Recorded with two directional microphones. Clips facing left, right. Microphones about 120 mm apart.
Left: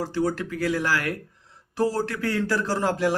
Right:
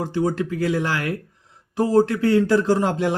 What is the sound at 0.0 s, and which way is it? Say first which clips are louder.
A man's voice: right 3 dB; 20° right (ahead or behind).